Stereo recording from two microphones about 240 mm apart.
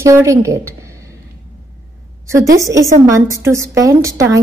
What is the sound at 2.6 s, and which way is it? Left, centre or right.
A woman's voice, centre.